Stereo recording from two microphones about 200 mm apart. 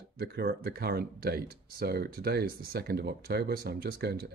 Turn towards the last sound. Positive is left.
turn(degrees=-50)  # may be behind; listen again after turning